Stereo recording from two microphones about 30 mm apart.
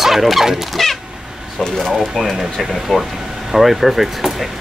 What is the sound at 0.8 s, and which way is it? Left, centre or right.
Speech, centre.